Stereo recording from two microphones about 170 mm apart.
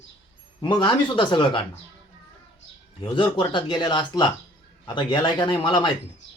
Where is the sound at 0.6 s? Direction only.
25° left (ahead or behind).